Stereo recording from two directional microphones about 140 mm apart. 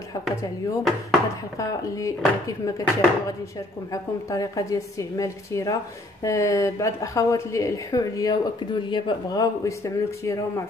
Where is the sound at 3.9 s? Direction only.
25° left (ahead or behind).